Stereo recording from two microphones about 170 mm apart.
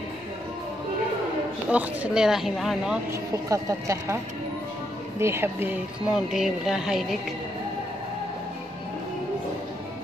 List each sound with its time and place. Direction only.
1.7 s speech: 5° right (ahead or behind)
3.1 s a woman's voice: 15° right (ahead or behind)
5.2 s speech: 15° right (ahead or behind)